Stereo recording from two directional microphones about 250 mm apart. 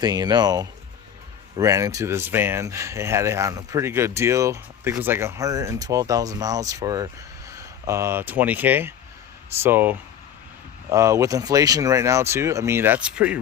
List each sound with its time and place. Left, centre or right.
0.0 s speech: centre